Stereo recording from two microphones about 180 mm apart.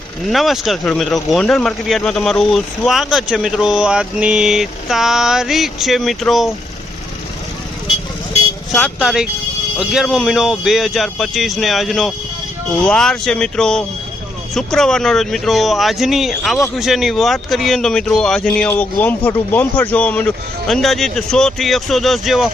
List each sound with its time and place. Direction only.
0.3 s speech: centre (ahead or behind)
8.7 s speech: centre (ahead or behind)